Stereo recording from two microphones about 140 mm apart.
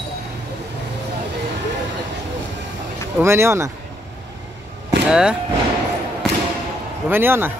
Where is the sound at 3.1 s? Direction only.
15° right (ahead or behind).